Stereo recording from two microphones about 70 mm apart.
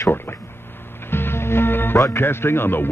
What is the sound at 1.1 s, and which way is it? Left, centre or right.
Music, left.